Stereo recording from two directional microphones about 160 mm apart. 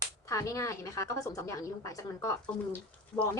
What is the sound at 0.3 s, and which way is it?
A woman's voice, 20° left (ahead or behind).